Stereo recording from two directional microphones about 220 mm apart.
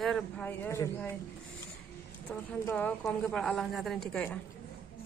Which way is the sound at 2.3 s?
10° left (ahead or behind).